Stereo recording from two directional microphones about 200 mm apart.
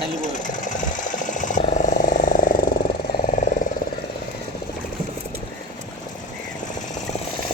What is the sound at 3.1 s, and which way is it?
Vehicle, 45° left (ahead or behind).